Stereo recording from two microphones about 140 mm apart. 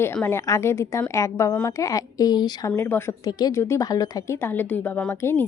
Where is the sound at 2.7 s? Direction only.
15° left (ahead or behind).